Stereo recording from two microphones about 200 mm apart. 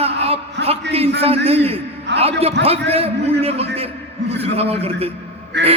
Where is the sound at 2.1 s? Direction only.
60° right (ahead or behind).